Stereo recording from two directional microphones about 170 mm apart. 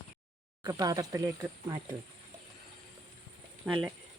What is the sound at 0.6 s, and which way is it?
Speech, 20° right (ahead or behind).